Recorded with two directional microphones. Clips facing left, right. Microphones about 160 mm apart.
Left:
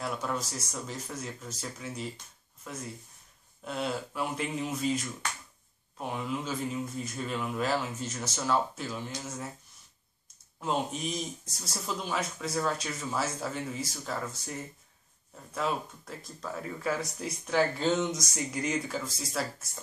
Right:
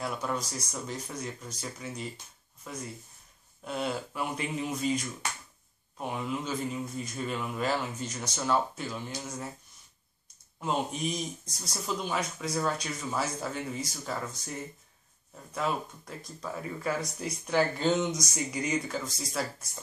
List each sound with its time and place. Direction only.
0.0 s speech: centre (ahead or behind)
10.6 s speech: centre (ahead or behind)
15.5 s speech: centre (ahead or behind)